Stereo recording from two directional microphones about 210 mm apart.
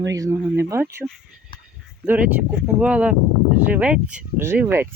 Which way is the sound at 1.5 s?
25° left (ahead or behind).